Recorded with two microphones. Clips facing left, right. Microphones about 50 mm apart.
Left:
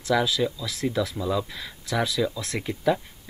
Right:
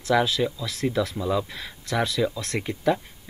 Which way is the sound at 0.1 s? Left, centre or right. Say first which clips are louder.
Right 1 dB; centre.